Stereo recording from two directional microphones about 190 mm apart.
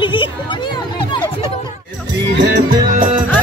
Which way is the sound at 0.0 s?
25° left (ahead or behind).